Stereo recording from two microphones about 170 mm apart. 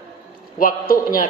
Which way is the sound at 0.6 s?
55° left (ahead or behind).